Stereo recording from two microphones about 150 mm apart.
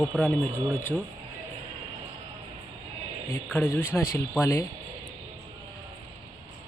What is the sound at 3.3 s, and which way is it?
Speech, 15° left (ahead or behind).